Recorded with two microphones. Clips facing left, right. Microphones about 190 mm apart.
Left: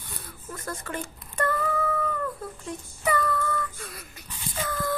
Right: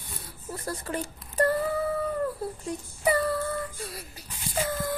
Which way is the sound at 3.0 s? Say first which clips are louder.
Right 1 dB; 30° right (ahead or behind).